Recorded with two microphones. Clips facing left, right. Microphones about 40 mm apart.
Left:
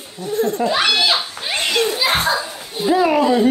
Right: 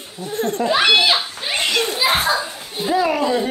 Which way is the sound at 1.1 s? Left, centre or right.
Centre.